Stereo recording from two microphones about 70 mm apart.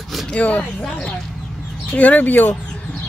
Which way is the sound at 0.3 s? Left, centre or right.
Centre.